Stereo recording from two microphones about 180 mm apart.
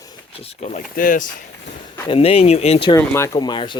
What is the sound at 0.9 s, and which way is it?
Speech, 50° left (ahead or behind).